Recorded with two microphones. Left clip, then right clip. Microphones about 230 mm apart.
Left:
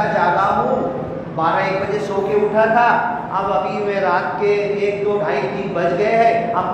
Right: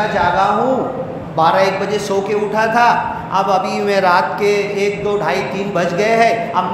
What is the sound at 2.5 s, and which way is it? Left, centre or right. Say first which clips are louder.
Speech: right 2 dB; right.